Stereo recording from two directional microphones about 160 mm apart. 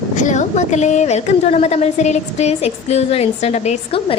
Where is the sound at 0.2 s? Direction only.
50° left (ahead or behind).